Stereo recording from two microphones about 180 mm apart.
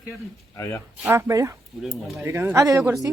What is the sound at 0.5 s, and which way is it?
Speech, 15° left (ahead or behind).